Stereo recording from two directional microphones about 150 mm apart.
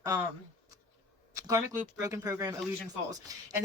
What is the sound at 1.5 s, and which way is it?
Speech, 20° right (ahead or behind).